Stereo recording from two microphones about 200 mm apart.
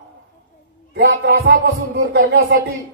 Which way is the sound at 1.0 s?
55° right (ahead or behind).